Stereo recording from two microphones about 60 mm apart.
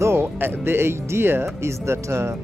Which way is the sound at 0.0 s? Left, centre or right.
Right.